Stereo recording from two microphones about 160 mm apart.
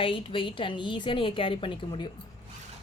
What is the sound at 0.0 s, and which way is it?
A woman's voice, 35° left (ahead or behind).